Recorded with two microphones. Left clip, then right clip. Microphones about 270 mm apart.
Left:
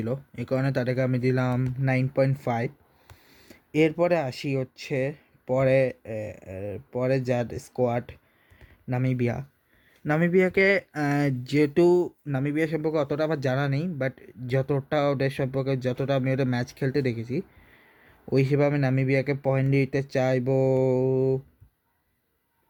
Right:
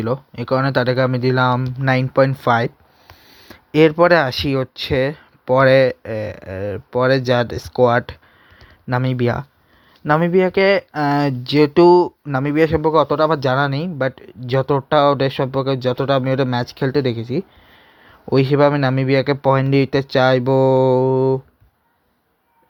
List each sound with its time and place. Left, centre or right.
0.0 s speech: centre